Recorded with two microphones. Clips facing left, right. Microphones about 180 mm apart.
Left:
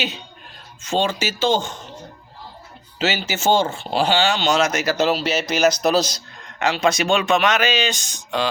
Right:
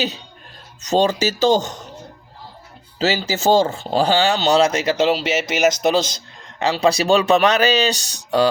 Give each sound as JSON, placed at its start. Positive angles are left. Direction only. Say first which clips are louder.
{"t": 0.8, "sound": "speech", "louder": "right 5 dB", "side_deg": -40}
{"t": 3.0, "sound": "speech", "louder": "right 3 dB", "side_deg": -35}